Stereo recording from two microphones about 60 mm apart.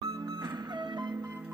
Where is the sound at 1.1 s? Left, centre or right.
Right.